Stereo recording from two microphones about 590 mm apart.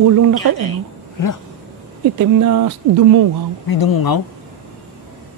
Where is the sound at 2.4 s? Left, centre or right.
Right.